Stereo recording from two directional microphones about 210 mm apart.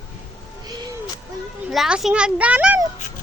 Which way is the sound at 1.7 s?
Centre (ahead or behind).